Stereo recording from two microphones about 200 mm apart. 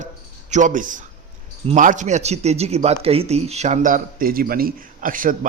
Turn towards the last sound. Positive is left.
turn(degrees=-45)  # may be behind; listen again after turning